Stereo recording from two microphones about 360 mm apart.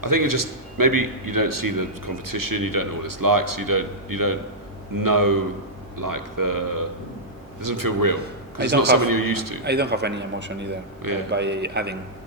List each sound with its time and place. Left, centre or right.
0.0 s a man's voice: right
9.6 s a man's voice: right
11.0 s a man's voice: right
11.3 s a man's voice: right